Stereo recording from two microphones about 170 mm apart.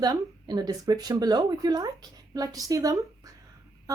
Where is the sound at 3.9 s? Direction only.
20° right (ahead or behind).